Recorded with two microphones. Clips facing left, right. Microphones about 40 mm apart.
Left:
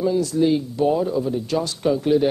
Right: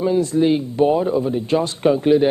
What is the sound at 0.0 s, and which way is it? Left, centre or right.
A man's voice, right.